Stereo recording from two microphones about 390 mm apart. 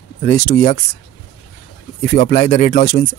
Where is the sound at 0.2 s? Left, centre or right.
Left.